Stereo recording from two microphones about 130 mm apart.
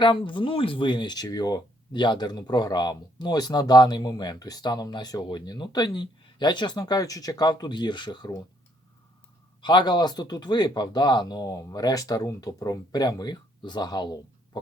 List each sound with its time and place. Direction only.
0.0 s speech: 40° left (ahead or behind)
9.6 s speech: 35° left (ahead or behind)